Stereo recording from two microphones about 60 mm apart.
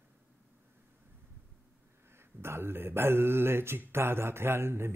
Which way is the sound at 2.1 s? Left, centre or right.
Right.